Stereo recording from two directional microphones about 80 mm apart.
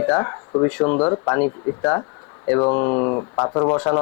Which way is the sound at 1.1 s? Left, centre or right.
Left.